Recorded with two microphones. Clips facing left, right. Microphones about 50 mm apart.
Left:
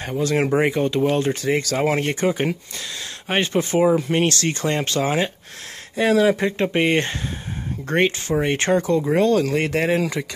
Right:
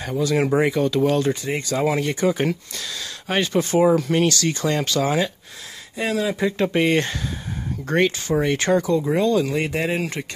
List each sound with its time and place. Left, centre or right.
0.2 s speech: left
0.6 s speech: left
1.3 s speech: left
1.8 s speech: left
3.3 s speech: left
4.3 s speech: left
5.9 s speech: left
6.6 s speech: left
9.1 s speech: left